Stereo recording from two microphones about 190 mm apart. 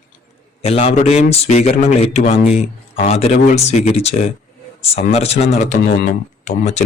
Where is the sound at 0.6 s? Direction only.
30° left (ahead or behind).